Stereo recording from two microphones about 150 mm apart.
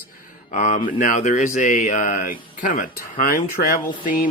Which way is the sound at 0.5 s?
50° left (ahead or behind).